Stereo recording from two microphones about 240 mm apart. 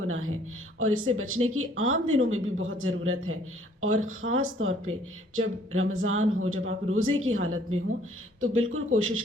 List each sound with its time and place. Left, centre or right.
0.8 s speech: right